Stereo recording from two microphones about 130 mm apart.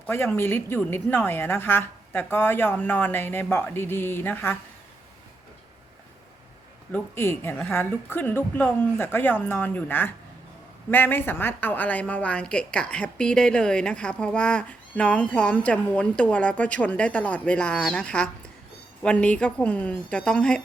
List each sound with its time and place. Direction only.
0.0 s a woman's voice: 15° left (ahead or behind)
6.9 s a woman's voice: 20° left (ahead or behind)